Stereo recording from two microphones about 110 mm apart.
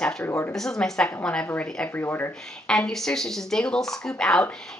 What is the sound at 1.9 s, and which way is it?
Speech, 20° left (ahead or behind).